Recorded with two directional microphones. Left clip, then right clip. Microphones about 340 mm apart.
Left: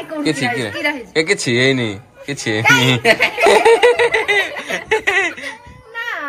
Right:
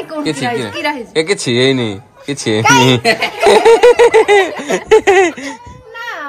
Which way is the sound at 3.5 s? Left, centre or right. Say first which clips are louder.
Right 6 dB; centre.